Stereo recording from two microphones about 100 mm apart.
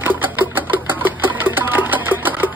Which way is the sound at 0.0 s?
20° right (ahead or behind).